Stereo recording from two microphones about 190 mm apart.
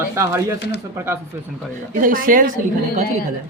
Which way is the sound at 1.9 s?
45° right (ahead or behind).